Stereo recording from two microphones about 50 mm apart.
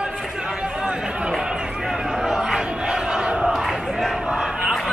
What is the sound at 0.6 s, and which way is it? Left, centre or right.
Chatter, centre.